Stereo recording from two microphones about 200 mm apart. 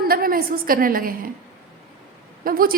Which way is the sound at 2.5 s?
45° right (ahead or behind).